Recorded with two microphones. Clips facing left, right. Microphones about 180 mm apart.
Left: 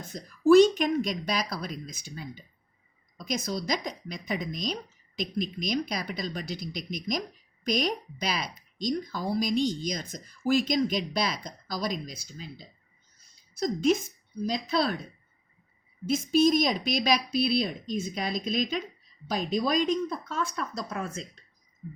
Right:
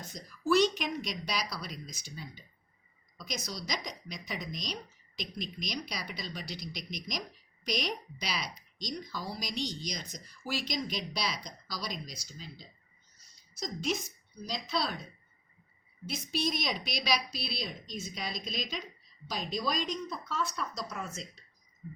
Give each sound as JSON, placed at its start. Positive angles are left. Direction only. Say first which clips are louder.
{"t": 0.0, "sound": "a woman's voice", "louder": "left 11 dB", "side_deg": 50}
{"t": 16.0, "sound": "speech", "louder": "left 12 dB", "side_deg": 45}